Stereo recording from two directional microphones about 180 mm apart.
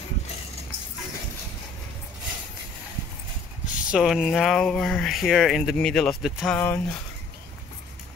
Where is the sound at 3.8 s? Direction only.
5° right (ahead or behind).